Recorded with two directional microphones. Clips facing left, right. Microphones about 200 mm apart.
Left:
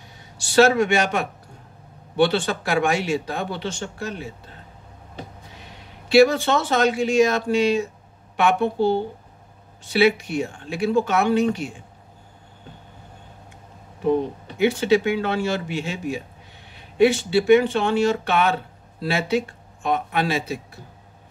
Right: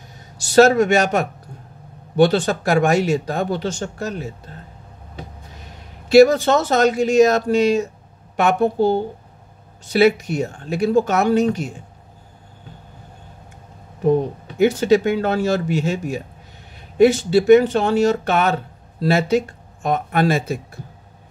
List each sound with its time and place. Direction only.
0.4 s speech: 40° right (ahead or behind)
5.7 s speech: 45° right (ahead or behind)
14.6 s speech: 45° right (ahead or behind)